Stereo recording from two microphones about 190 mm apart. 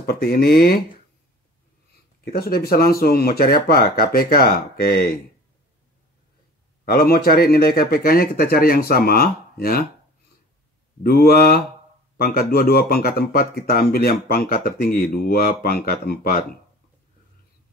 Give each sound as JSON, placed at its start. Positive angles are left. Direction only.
{"t": 0.0, "sound": "speech", "side_deg": 50}
{"t": 2.3, "sound": "speech", "side_deg": 55}
{"t": 6.8, "sound": "speech", "side_deg": 55}
{"t": 11.0, "sound": "speech", "side_deg": 55}